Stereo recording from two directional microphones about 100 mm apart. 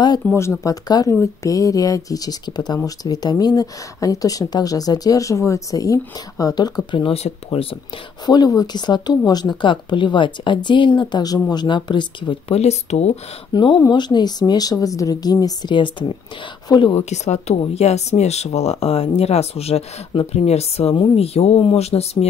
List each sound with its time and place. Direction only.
0.2 s speech: 15° left (ahead or behind)
0.7 s speech: 40° left (ahead or behind); by 7.6 s 70° left (ahead or behind)
8.3 s speech: 40° left (ahead or behind)
12.4 s speech: 90° left
13.5 s speech: 50° left (ahead or behind)
15.7 s speech: 55° left (ahead or behind)
17.7 s speech: 90° left